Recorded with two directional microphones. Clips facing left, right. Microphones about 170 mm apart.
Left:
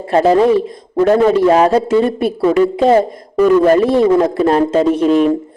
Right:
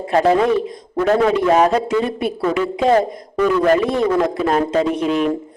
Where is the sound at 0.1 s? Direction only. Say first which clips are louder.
Left 4 dB; 30° left (ahead or behind).